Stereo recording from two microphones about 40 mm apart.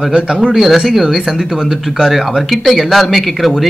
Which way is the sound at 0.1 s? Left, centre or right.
Right.